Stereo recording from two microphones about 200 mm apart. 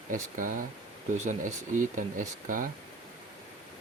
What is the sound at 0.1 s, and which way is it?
Speech, 45° right (ahead or behind).